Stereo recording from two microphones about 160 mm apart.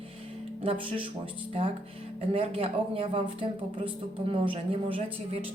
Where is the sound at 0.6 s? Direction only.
35° right (ahead or behind).